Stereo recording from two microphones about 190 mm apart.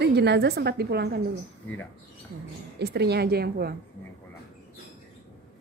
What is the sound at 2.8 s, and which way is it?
Speech, 60° right (ahead or behind).